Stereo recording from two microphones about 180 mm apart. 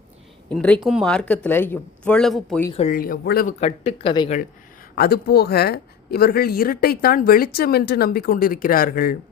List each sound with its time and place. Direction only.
0.4 s speech: 5° left (ahead or behind)
2.9 s speech: 55° left (ahead or behind)
3.6 s speech: 35° left (ahead or behind)
4.9 s speech: 60° left (ahead or behind)